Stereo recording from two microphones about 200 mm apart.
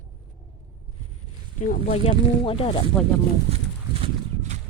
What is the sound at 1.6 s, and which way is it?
Speech, 40° left (ahead or behind).